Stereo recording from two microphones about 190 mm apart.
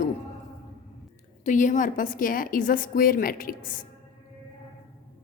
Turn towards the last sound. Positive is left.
turn(degrees=45)  # may be behind; listen again after turning